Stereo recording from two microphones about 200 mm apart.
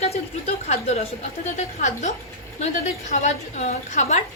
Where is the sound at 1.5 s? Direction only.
35° left (ahead or behind).